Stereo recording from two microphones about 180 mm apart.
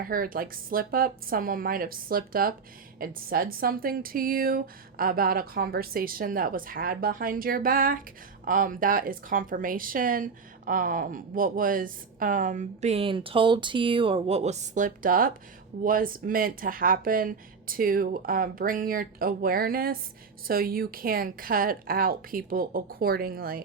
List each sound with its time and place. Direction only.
0.0 s speech: 50° right (ahead or behind)